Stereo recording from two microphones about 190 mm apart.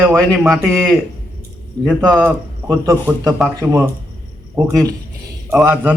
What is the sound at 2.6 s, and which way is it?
A man's voice, 15° right (ahead or behind).